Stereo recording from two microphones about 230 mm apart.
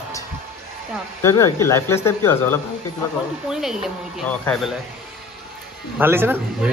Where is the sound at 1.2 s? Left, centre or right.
Centre.